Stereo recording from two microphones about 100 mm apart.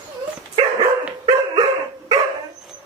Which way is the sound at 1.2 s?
50° right (ahead or behind).